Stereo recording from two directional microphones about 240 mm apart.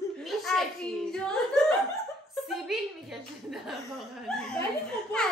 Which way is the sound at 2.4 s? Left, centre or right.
Centre.